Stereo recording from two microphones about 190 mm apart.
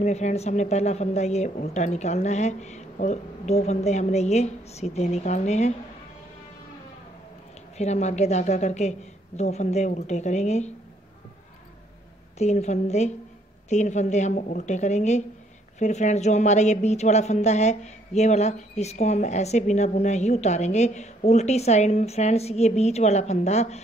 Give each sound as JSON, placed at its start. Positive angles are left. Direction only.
{"t": 0.0, "sound": "speech", "side_deg": 35}
{"t": 7.7, "sound": "speech", "side_deg": 35}
{"t": 12.4, "sound": "speech", "side_deg": 35}